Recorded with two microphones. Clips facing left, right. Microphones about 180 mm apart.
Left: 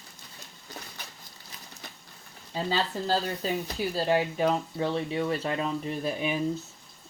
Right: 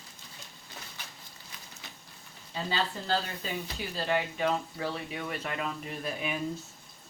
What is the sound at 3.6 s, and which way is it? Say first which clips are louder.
Speech: left 6 dB; 35° left (ahead or behind).